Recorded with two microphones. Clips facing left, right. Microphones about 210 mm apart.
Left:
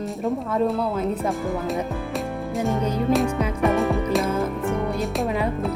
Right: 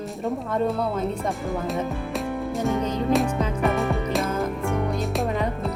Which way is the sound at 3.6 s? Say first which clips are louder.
Left 4 dB; centre (ahead or behind).